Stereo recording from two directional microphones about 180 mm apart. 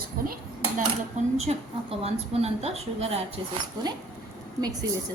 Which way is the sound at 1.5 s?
35° right (ahead or behind).